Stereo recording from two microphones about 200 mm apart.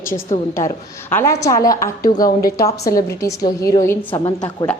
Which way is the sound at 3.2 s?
15° left (ahead or behind).